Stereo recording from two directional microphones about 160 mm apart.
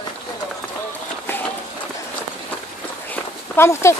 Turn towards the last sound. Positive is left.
turn(degrees=15)  # may be behind; listen again after turning